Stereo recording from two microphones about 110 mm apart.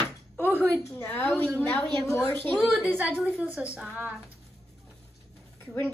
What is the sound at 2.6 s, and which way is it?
A woman's voice, 5° right (ahead or behind).